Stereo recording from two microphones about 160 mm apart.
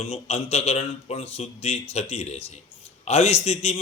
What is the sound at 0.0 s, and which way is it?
Speech, 40° left (ahead or behind).